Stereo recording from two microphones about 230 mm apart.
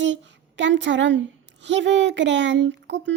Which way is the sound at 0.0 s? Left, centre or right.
Right.